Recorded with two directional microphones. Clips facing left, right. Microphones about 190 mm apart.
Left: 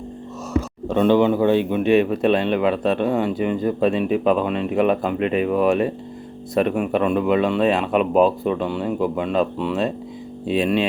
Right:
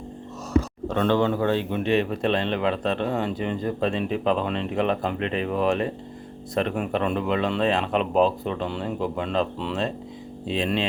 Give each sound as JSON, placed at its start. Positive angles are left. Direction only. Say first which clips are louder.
{"t": 0.9, "sound": "speech", "louder": "left 6 dB", "side_deg": 15}